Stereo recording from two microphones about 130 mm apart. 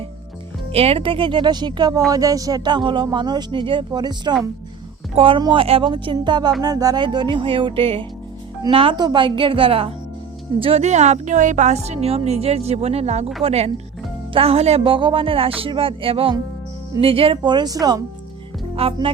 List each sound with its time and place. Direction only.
0.7 s speech: 50° right (ahead or behind)
10.6 s a woman's voice: 55° right (ahead or behind); by 18.0 s 30° right (ahead or behind)
18.8 s speech: 50° right (ahead or behind)